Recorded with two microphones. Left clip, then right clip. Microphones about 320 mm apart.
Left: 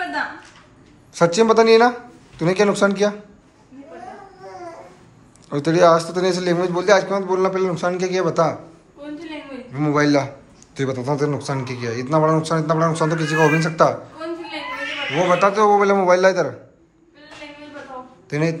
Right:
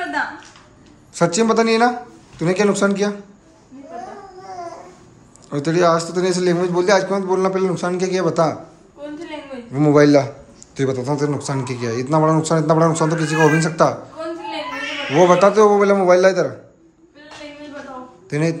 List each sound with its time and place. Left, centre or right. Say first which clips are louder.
1.1 s speech: left 2 dB; centre
5.5 s a man's voice: left 2 dB; centre
9.7 s a man's voice: right 5 dB; centre
15.1 s a man's voice: right 5 dB; centre
18.3 s a man's voice: right 1 dB; centre